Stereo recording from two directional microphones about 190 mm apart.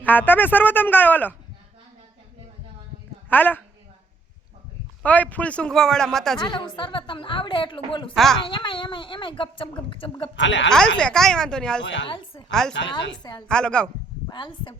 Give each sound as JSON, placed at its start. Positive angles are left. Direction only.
{"t": 0.0, "sound": "a man's voice", "side_deg": 10}
{"t": 3.2, "sound": "a woman's voice", "side_deg": 10}
{"t": 5.0, "sound": "a man's voice", "side_deg": 10}
{"t": 6.4, "sound": "speech", "side_deg": 25}
{"t": 8.1, "sound": "a man's voice", "side_deg": 0}
{"t": 8.4, "sound": "speech", "side_deg": 25}
{"t": 10.3, "sound": "a woman's voice", "side_deg": 75}
{"t": 10.7, "sound": "a man's voice", "side_deg": 5}
{"t": 12.0, "sound": "speech", "side_deg": 25}
{"t": 12.5, "sound": "a man's voice", "side_deg": 5}
{"t": 14.3, "sound": "speech", "side_deg": 25}